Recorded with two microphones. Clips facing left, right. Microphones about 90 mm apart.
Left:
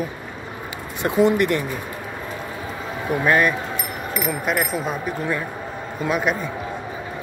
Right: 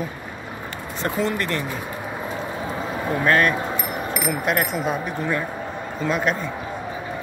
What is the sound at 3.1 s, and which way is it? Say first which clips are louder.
Speech: left 1 dB; 10° left (ahead or behind).